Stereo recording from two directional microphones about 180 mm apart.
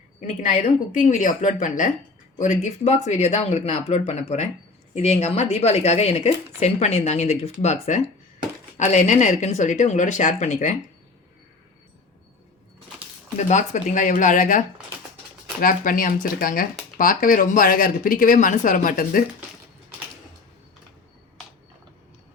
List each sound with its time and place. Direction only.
0.2 s speech: 45° left (ahead or behind)
13.5 s speech: 40° left (ahead or behind)
15.6 s speech: 50° left (ahead or behind)